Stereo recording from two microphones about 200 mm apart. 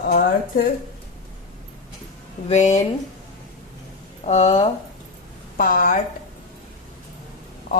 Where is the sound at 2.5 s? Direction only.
35° left (ahead or behind).